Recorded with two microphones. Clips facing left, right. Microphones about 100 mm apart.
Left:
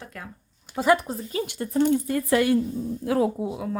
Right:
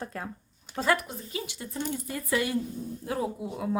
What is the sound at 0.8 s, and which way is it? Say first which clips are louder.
Speech: left 6 dB; 20° left (ahead or behind).